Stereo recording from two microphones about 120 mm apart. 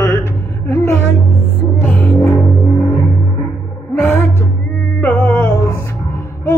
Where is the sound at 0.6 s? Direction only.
25° left (ahead or behind).